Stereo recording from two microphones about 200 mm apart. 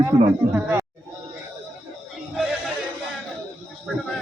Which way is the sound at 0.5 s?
15° right (ahead or behind).